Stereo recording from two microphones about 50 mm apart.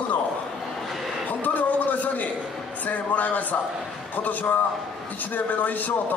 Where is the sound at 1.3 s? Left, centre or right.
Left.